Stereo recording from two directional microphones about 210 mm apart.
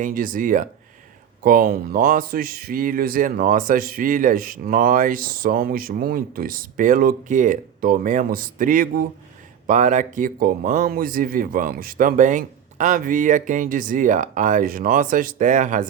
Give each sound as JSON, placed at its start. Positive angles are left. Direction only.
{"t": 0.0, "sound": "speech", "side_deg": -40}